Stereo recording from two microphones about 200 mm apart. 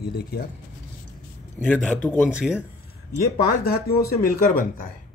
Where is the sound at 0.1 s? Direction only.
50° left (ahead or behind).